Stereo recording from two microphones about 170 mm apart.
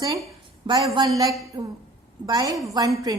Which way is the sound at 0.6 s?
25° right (ahead or behind).